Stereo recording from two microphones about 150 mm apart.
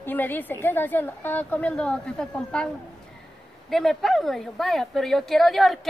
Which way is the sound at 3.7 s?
Centre (ahead or behind).